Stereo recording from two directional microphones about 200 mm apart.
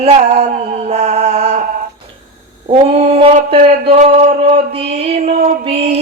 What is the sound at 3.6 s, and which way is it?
Music, 30° right (ahead or behind).